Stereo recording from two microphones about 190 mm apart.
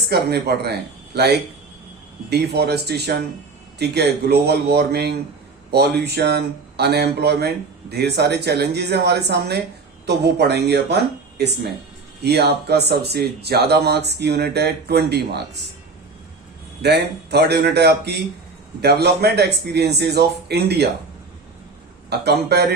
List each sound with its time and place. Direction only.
0.1 s speech: 60° right (ahead or behind)
12.2 s speech: 60° right (ahead or behind)
16.8 s speech: 60° right (ahead or behind)
22.1 s speech: 60° right (ahead or behind)